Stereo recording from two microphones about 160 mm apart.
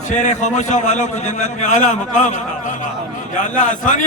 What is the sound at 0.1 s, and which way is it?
A man's voice, 50° left (ahead or behind).